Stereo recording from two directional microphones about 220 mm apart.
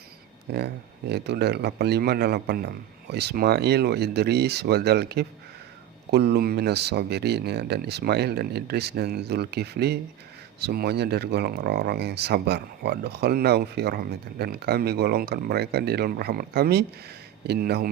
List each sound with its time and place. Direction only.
0.5 s speech: 50° right (ahead or behind)